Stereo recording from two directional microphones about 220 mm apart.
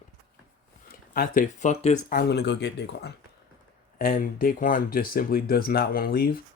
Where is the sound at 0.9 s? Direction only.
40° left (ahead or behind).